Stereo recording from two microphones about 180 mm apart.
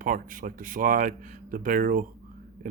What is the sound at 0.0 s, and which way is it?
Speech, 50° right (ahead or behind).